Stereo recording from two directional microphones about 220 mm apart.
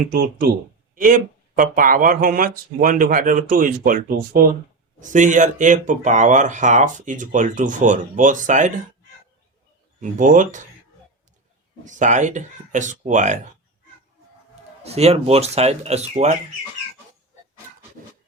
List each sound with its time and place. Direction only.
0.1 s speech: 45° right (ahead or behind)
10.0 s speech: 35° right (ahead or behind)
11.9 s speech: 35° right (ahead or behind)
14.8 s speech: 30° right (ahead or behind)